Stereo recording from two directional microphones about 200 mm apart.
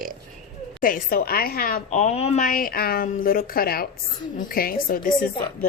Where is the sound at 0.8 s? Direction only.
45° left (ahead or behind).